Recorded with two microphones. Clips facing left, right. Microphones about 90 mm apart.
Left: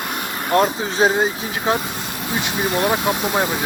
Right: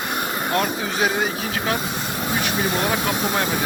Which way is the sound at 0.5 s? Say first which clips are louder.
Left 7 dB; 30° left (ahead or behind).